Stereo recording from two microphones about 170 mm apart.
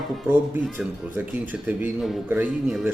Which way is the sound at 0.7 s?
10° right (ahead or behind).